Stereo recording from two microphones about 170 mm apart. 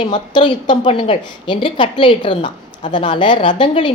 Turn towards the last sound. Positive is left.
turn(degrees=30)  # may be behind; listen again after turning